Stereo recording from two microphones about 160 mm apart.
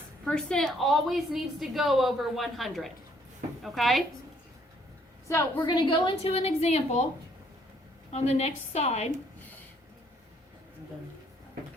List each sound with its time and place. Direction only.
0.3 s a woman's voice: 5° left (ahead or behind)
5.3 s a woman's voice: 20° left (ahead or behind); by 7.0 s 40° left (ahead or behind)
8.1 s a woman's voice: 40° left (ahead or behind)